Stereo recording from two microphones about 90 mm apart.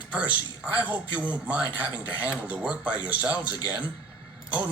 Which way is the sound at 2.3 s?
10° right (ahead or behind).